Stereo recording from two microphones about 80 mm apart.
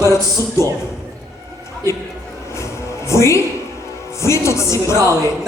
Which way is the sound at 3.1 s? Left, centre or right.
Left.